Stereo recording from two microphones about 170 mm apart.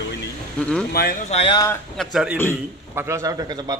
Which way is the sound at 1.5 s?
15° left (ahead or behind).